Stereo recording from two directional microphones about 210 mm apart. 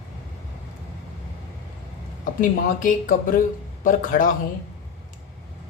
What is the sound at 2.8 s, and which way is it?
A man's voice, 40° left (ahead or behind).